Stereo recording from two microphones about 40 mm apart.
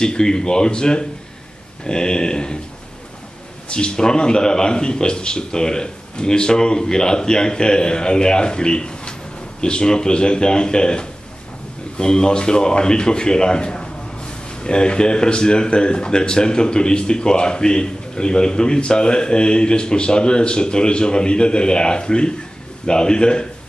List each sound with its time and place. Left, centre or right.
0.0 s a man's voice: centre
3.6 s a man's voice: left